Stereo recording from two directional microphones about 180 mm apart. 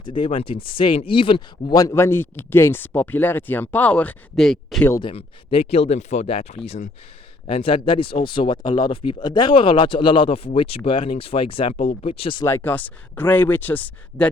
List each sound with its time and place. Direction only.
0.0 s speech: 30° left (ahead or behind); by 4.9 s centre (ahead or behind)
5.0 s speech: 30° left (ahead or behind)
12.5 s speech: 10° left (ahead or behind)